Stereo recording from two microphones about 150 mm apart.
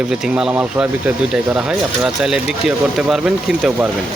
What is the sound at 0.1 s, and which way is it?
Speech, 5° right (ahead or behind).